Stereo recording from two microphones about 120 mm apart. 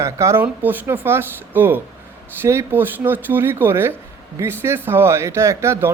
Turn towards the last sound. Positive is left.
turn(degrees=-25)  # may be behind; listen again after turning